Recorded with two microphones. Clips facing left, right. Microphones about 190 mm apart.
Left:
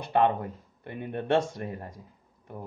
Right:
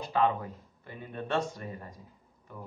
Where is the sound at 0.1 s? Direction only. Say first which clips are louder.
Left 4 dB; 55° left (ahead or behind).